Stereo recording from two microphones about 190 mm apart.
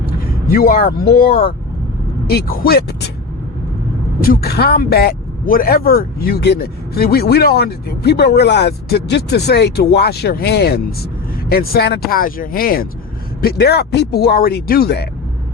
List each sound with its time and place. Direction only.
0.5 s speech: 50° left (ahead or behind)
4.2 s speech: 55° left (ahead or behind)